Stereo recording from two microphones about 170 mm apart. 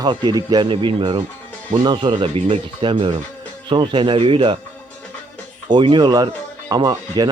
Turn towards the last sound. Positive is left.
turn(degrees=-25)  # may be behind; listen again after turning